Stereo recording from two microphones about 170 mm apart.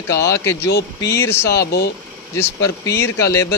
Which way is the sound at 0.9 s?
15° left (ahead or behind).